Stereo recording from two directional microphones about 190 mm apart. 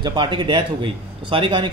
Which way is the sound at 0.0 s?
25° right (ahead or behind).